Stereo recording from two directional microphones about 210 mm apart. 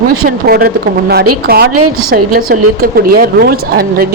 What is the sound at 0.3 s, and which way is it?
Speech, 45° right (ahead or behind).